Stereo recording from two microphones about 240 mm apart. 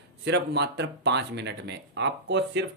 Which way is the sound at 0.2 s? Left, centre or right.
Right.